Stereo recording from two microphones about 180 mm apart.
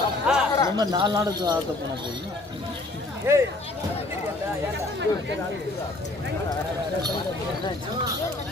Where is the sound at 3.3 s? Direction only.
15° right (ahead or behind).